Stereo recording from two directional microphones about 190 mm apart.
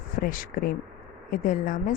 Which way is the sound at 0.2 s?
45° left (ahead or behind).